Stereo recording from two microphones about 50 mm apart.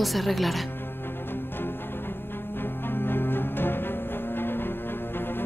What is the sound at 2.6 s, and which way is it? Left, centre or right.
Music, left.